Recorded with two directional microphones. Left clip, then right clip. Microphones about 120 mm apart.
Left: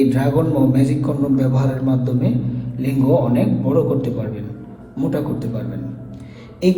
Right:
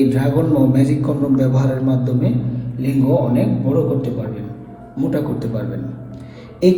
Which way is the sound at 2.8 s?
40° left (ahead or behind).